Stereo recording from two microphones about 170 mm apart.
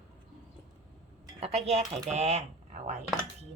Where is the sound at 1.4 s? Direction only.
40° right (ahead or behind).